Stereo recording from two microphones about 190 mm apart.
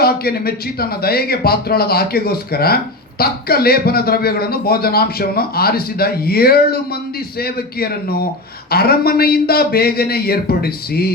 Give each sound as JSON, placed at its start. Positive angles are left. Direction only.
{"t": 0.0, "sound": "speech", "side_deg": 55}